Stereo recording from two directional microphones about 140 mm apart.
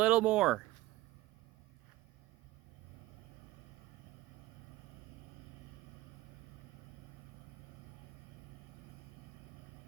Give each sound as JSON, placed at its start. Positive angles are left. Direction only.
{"t": 0.0, "sound": "speech", "side_deg": -10}